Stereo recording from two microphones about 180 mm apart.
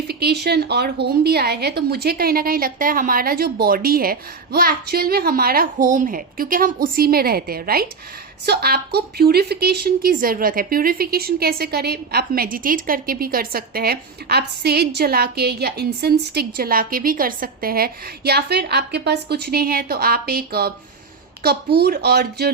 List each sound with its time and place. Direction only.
0.1 s a woman's voice: 65° right (ahead or behind)